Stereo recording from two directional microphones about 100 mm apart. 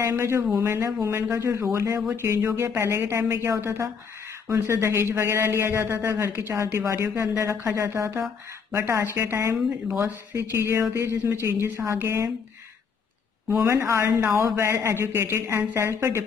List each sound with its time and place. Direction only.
0.0 s a man's voice: 25° right (ahead or behind)
13.7 s a man's voice: 30° right (ahead or behind)